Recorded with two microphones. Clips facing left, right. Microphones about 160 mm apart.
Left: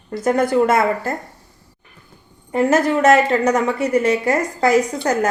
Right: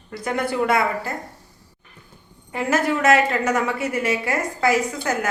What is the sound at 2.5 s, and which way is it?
A woman's voice, 40° left (ahead or behind).